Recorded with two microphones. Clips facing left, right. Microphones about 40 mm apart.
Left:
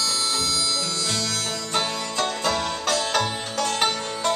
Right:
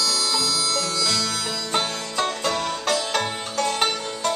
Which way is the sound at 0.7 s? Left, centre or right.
Right.